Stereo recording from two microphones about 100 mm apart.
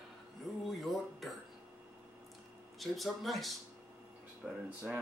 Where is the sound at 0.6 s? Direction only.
Centre (ahead or behind).